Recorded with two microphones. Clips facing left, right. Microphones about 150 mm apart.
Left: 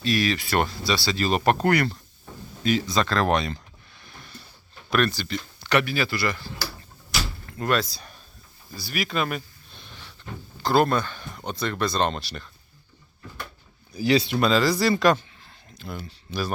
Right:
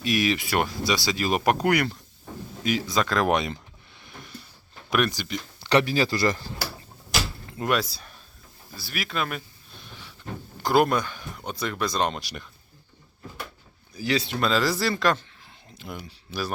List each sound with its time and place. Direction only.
0.0 s speech: 15° right (ahead or behind)
4.9 s speech: 15° right (ahead or behind)
5.5 s speech: 30° right (ahead or behind)
7.4 s speech: 15° right (ahead or behind)
8.7 s a sound: centre (ahead or behind)
10.6 s speech: 10° right (ahead or behind)
13.9 s speech: 15° left (ahead or behind)
14.4 s speech: 5° right (ahead or behind)
15.7 s speech: 15° right (ahead or behind)